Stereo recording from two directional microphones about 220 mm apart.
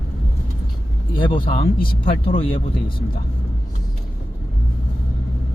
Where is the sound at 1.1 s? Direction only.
20° left (ahead or behind).